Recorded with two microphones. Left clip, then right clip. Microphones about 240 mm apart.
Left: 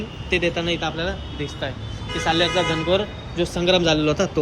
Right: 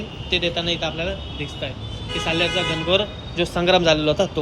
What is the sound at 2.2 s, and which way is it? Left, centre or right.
Speech, centre.